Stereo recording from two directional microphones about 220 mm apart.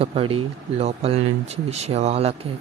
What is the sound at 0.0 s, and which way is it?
Speech, 25° right (ahead or behind).